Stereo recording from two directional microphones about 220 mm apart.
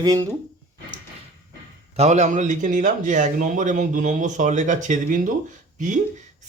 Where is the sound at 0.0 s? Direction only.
15° right (ahead or behind).